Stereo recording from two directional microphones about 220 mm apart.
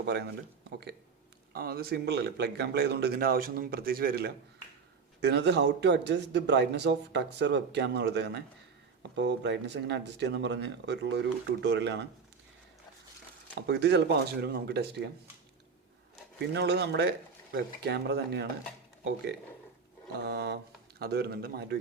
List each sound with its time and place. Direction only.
0.0 s speech: 50° right (ahead or behind)
1.5 s speech: 45° right (ahead or behind)
13.6 s speech: 50° right (ahead or behind)
16.4 s speech: 50° right (ahead or behind)
20.2 s speech: 50° right (ahead or behind)